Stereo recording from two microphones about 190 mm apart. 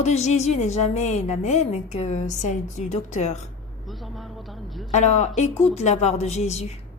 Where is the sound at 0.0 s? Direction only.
35° left (ahead or behind).